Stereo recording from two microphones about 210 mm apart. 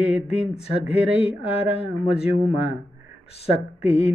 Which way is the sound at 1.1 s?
30° left (ahead or behind).